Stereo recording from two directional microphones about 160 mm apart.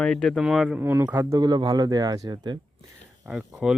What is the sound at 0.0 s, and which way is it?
Speech, 5° left (ahead or behind).